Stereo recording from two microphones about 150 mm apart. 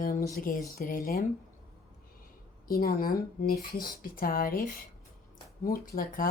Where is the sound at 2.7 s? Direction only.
85° left.